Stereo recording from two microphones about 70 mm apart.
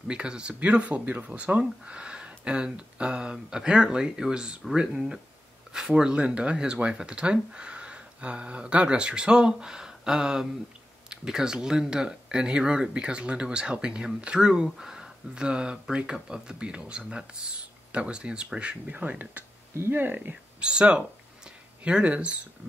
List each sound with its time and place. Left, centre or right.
0.1 s speech: centre
19.7 s speech: right
20.6 s speech: centre
21.5 s a sound: centre